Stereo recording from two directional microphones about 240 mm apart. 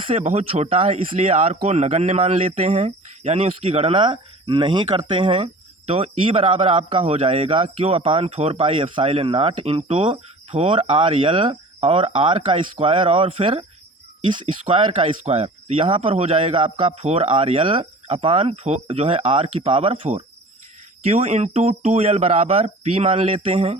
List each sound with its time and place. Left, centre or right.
0.1 s speech: right